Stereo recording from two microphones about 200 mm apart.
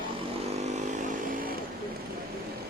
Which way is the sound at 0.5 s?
35° right (ahead or behind).